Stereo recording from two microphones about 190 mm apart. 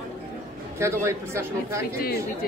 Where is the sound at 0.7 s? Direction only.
15° right (ahead or behind).